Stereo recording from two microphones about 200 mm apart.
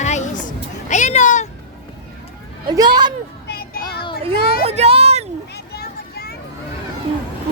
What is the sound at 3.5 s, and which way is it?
Child singing, 50° left (ahead or behind).